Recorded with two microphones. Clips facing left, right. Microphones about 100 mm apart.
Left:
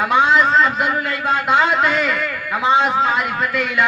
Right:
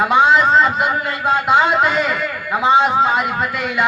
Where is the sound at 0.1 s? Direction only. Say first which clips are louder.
Right 1 dB; 15° right (ahead or behind).